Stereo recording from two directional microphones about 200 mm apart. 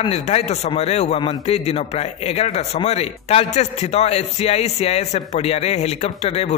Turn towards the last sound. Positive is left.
turn(degrees=30)  # may be behind; listen again after turning